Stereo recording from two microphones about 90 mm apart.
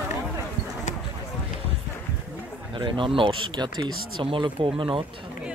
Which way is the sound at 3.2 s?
65° right (ahead or behind).